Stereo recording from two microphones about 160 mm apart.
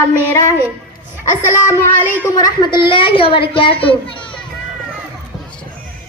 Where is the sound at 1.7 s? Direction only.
10° left (ahead or behind).